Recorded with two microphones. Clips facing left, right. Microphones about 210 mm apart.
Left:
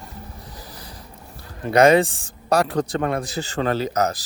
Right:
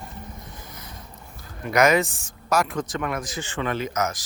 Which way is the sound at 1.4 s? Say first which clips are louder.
Left 5 dB; 30° left (ahead or behind).